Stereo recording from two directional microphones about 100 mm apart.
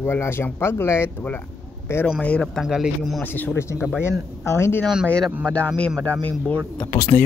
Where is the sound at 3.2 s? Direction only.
20° left (ahead or behind).